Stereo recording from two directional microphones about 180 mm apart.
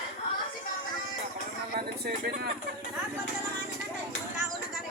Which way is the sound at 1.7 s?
60° right (ahead or behind).